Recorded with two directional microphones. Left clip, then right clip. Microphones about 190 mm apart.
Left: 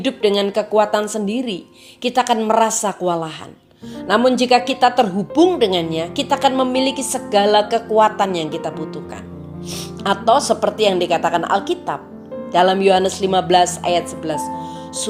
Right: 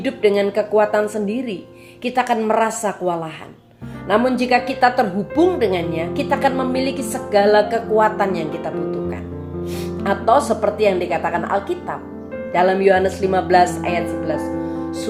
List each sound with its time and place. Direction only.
0.0 s speech: 30° left (ahead or behind)